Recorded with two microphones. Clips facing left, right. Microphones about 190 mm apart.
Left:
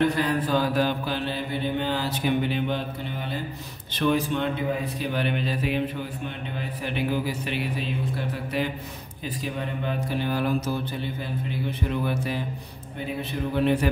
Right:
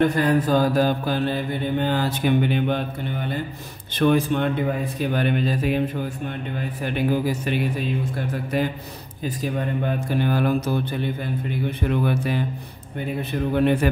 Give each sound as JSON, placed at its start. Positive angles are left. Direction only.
{"t": 0.0, "sound": "mantra", "side_deg": -50}
{"t": 3.9, "sound": "mantra", "side_deg": -50}
{"t": 6.8, "sound": "mantra", "side_deg": -45}
{"t": 9.2, "sound": "mantra", "side_deg": -45}
{"t": 11.9, "sound": "music", "side_deg": -60}
{"t": 13.6, "sound": "music", "side_deg": -55}